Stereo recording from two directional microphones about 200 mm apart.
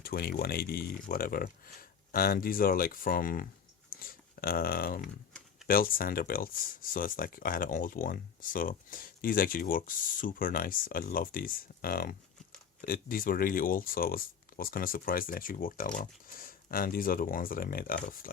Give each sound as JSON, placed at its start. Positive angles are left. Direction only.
{"t": 0.0, "sound": "speech", "side_deg": 50}